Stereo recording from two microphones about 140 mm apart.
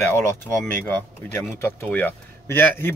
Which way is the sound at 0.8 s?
15° left (ahead or behind).